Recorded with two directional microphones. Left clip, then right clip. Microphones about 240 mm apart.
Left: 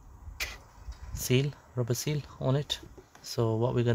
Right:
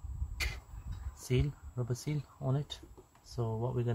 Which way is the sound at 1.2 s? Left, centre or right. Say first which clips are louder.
Left 7 dB; left.